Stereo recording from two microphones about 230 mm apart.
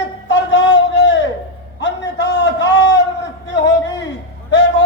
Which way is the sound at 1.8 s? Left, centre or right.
Left.